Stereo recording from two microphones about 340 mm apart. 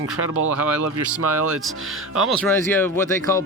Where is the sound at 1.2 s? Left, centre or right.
Right.